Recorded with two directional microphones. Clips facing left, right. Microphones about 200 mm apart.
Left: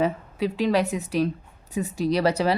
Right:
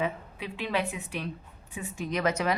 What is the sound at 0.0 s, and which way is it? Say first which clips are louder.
A woman's voice: left 8 dB; 40° left (ahead or behind).